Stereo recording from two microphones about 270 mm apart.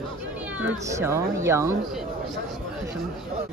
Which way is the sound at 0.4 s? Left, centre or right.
Centre.